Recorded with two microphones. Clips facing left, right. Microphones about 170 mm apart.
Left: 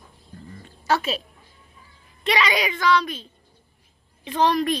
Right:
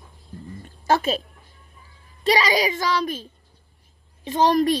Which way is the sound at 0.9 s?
50° right (ahead or behind).